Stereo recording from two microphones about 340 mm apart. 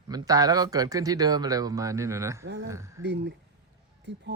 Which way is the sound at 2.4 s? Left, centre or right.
Right.